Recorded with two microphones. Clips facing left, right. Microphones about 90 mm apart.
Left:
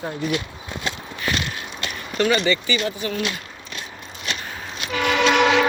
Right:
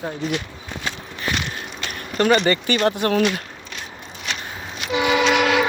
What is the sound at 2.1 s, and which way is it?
Speech, 40° right (ahead or behind).